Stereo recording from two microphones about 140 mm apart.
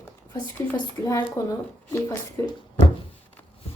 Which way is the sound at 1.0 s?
25° left (ahead or behind).